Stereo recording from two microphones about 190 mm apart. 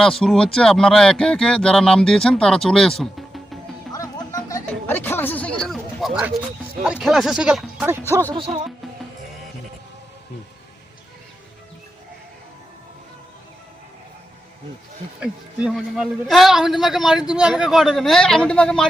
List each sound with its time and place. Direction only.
0.0 s a man's voice: centre (ahead or behind)
3.9 s music: 20° left (ahead or behind); by 6.3 s centre (ahead or behind)
6.8 s a man's voice: 5° right (ahead or behind)
8.1 s music: 15° right (ahead or behind)
8.4 s speech: 30° right (ahead or behind)
15.2 s a man's voice: 5° right (ahead or behind)